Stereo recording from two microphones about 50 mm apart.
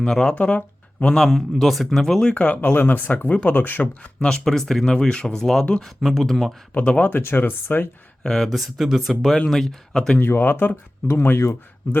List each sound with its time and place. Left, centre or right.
0.0 s speech: centre
0.3 s speech: left
1.1 s speech: centre
2.3 s speech: left
4.2 s speech: centre
4.9 s speech: centre
5.8 s speech: centre
6.7 s speech: left
7.1 s speech: left
8.2 s speech: centre
8.5 s speech: centre
10.2 s speech: left
11.2 s speech: left